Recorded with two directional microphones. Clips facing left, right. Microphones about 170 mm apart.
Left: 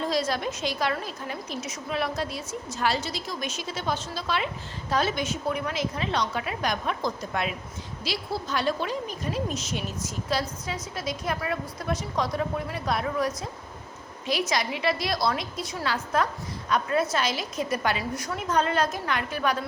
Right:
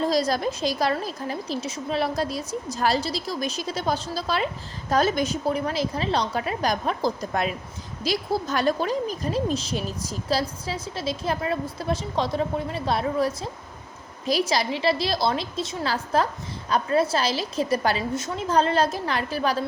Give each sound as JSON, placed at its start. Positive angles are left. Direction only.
{"t": 0.0, "sound": "a woman's voice", "side_deg": -35}